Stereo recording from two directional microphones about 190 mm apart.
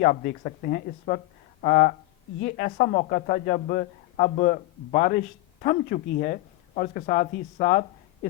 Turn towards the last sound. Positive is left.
turn(degrees=45)  # may be behind; listen again after turning